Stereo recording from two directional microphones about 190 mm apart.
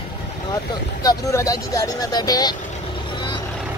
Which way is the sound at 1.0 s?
15° left (ahead or behind).